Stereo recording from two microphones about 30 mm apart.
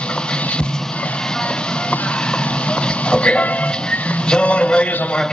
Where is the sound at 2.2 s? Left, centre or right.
Left.